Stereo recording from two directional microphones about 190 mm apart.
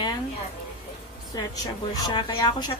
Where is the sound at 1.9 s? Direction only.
20° left (ahead or behind).